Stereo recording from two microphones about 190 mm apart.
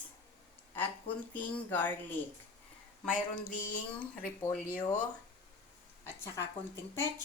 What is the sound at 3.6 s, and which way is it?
Speech, 45° left (ahead or behind).